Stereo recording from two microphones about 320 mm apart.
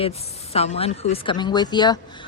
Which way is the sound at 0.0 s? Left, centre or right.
Centre.